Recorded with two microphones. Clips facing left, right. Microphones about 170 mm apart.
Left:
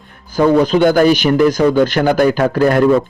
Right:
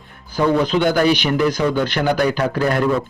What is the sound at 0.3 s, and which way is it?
A man's voice, 45° left (ahead or behind).